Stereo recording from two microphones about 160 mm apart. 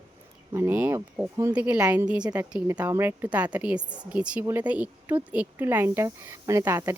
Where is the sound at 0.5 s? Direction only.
15° right (ahead or behind).